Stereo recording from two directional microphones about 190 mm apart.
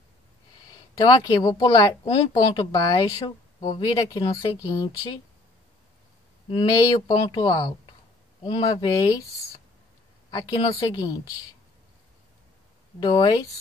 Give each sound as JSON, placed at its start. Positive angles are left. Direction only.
{"t": 0.7, "sound": "speech", "side_deg": 20}
{"t": 6.5, "sound": "speech", "side_deg": 25}
{"t": 10.3, "sound": "speech", "side_deg": 20}
{"t": 13.0, "sound": "speech", "side_deg": 20}